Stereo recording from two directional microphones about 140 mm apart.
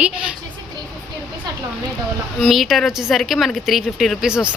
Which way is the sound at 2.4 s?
Centre (ahead or behind).